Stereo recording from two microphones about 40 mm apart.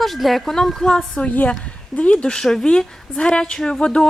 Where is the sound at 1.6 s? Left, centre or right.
Left.